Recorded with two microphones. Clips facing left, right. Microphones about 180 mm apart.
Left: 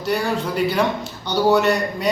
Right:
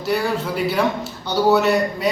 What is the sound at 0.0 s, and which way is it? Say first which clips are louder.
A man's voice: even; 5° right (ahead or behind).